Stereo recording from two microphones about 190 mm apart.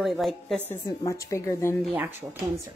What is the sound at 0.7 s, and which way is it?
A woman's voice, 15° left (ahead or behind).